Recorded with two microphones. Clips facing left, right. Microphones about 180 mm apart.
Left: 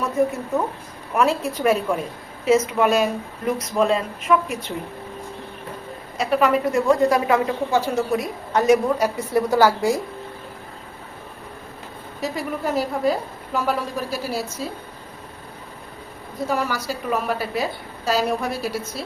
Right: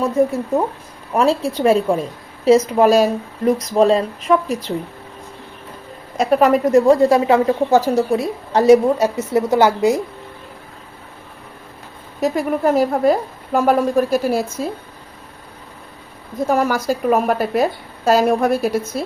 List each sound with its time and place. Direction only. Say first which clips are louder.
1.1 s a woman's voice: right 4 dB; 30° right (ahead or behind)
6.1 s speech: right 5 dB; 40° right (ahead or behind)
7.7 s speech: right 6 dB; 40° right (ahead or behind)
8.1 s a woman's voice: right 4 dB; 30° right (ahead or behind)
12.2 s a woman's voice: right 8 dB; 50° right (ahead or behind)
16.5 s a woman's voice: right 7 dB; 50° right (ahead or behind)